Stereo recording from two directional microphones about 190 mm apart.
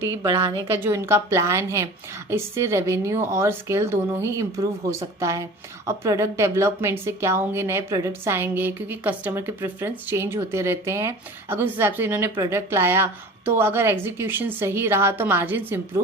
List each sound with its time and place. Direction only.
0.0 s a woman's voice: 20° right (ahead or behind)